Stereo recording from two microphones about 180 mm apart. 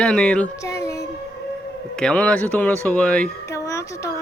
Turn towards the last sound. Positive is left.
turn(degrees=15)  # may be behind; listen again after turning